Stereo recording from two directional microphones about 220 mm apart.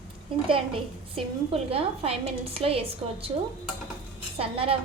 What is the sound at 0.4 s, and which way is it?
A woman's voice, 25° right (ahead or behind).